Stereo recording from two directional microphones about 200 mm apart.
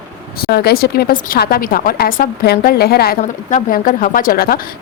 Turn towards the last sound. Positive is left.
turn(degrees=50)  # may be behind; listen again after turning